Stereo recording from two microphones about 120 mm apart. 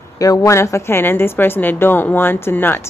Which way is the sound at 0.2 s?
30° left (ahead or behind).